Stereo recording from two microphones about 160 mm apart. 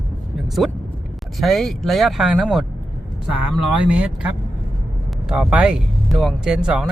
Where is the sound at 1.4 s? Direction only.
Centre (ahead or behind).